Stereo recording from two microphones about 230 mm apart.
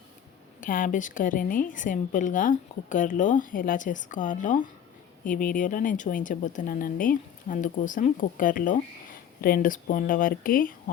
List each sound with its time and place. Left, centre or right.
0.6 s a woman's voice: left